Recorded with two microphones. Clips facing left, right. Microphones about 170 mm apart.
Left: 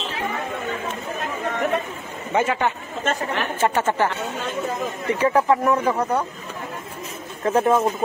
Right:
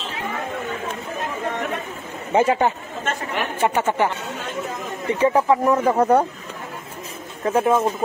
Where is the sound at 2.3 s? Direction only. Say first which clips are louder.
Right 4 dB; 35° right (ahead or behind).